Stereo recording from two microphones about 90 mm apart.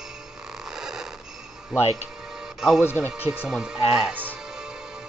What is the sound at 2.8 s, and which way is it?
Speech, 25° left (ahead or behind).